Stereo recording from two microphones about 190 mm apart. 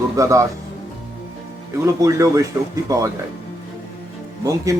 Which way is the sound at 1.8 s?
15° right (ahead or behind).